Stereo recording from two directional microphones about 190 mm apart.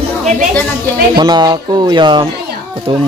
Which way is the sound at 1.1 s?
20° right (ahead or behind).